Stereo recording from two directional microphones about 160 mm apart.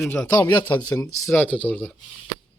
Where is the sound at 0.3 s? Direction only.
20° left (ahead or behind).